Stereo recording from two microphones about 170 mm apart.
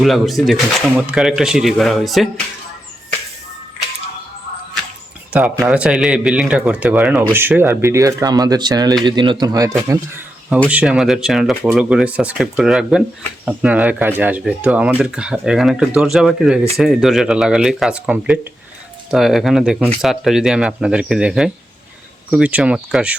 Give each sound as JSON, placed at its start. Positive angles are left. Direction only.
{"t": 0.0, "sound": "speech", "side_deg": 0}
{"t": 5.3, "sound": "a man's voice", "side_deg": -5}
{"t": 10.7, "sound": "speech", "side_deg": -5}